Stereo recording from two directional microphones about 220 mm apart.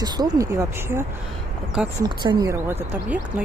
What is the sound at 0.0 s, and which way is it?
Speech, 15° right (ahead or behind).